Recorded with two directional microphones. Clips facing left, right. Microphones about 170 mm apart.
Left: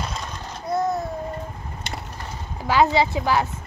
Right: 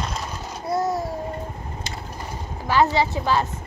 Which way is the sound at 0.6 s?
10° right (ahead or behind).